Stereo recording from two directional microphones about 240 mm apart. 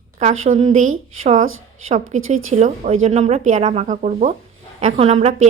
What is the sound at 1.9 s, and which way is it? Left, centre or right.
A woman's voice, right.